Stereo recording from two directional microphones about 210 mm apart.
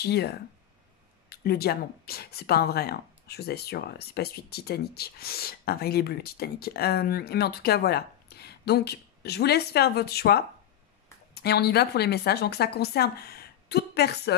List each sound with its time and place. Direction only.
0.0 s speech: 50° left (ahead or behind)
11.4 s speech: 50° left (ahead or behind)